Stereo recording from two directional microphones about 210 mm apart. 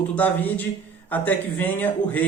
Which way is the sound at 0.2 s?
10° left (ahead or behind).